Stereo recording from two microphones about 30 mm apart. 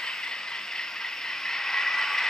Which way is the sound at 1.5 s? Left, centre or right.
Centre.